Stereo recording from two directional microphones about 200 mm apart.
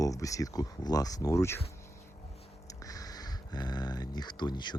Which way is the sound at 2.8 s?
15° left (ahead or behind).